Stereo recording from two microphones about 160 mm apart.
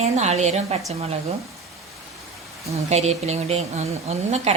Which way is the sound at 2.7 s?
45° right (ahead or behind).